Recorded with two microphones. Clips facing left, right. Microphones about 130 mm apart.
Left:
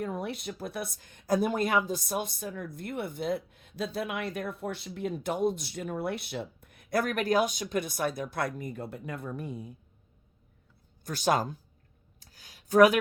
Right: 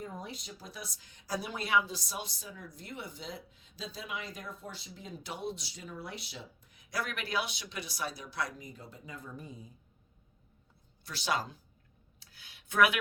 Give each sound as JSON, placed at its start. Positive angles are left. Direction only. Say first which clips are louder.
{"t": 0.0, "sound": "speech", "louder": "left 9 dB", "side_deg": 70}
{"t": 11.0, "sound": "speech", "louder": "left 7 dB", "side_deg": 45}
{"t": 12.2, "sound": "a sound", "louder": "left 3 dB", "side_deg": 40}